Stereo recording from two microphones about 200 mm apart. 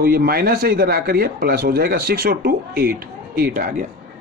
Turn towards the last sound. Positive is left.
turn(degrees=-45)  # may be behind; listen again after turning